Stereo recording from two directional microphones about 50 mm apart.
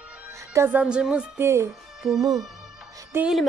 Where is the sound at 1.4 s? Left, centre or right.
Right.